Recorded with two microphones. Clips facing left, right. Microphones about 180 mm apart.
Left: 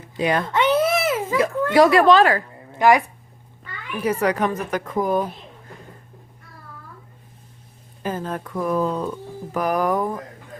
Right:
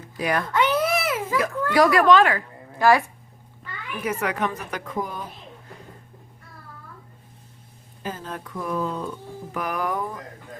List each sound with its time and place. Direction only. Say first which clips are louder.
0.2 s a child's voice: left 3 dB; 25° left (ahead or behind)
2.7 s speech: left 2 dB; 20° left (ahead or behind)
3.9 s a woman's voice: left 6 dB; 35° left (ahead or behind); by 5.2 s 50° left (ahead or behind)
8.0 s a woman's voice: left 6 dB; 50° left (ahead or behind)